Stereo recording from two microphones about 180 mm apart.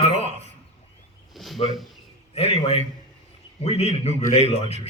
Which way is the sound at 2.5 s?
35° left (ahead or behind).